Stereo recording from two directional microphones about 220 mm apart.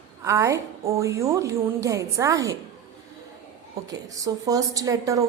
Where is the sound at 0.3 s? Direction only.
15° right (ahead or behind).